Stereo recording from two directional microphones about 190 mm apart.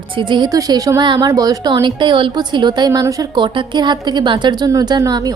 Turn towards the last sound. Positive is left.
turn(degrees=-20)  # may be behind; listen again after turning